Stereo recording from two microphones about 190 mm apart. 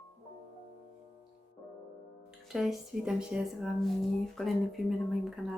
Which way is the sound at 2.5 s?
Centre (ahead or behind).